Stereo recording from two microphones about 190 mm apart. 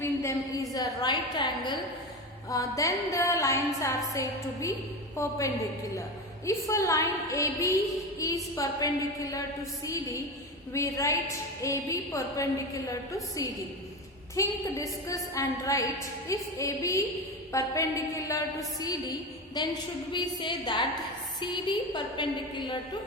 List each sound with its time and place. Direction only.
0.0 s a sound: 15° left (ahead or behind)
0.7 s a woman's voice: 20° left (ahead or behind)
6.4 s a woman's voice: 15° left (ahead or behind)
10.7 s a woman's voice: 15° left (ahead or behind)
14.3 s a woman's voice: 15° left (ahead or behind)
19.6 s a woman's voice: 20° left (ahead or behind)